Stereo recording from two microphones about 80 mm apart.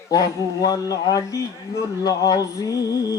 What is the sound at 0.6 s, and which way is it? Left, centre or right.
Speech, left.